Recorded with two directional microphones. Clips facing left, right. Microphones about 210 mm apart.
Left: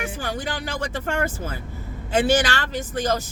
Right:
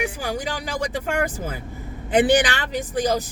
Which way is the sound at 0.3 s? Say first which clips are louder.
Right 1 dB; 15° right (ahead or behind).